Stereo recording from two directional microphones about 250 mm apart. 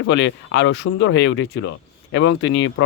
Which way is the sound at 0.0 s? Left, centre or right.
Left.